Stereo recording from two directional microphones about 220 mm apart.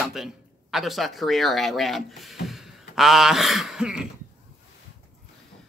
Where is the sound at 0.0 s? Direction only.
Centre (ahead or behind).